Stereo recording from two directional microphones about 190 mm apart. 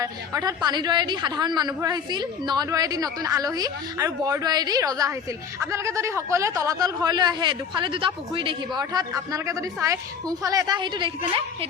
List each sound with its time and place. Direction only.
0.0 s a man's voice: 20° right (ahead or behind)